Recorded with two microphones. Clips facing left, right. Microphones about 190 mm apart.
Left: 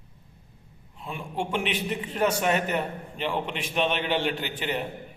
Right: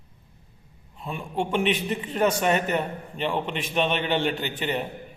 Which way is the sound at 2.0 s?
5° left (ahead or behind).